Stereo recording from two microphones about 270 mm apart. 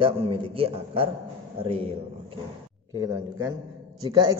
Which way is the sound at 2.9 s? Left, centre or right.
Centre.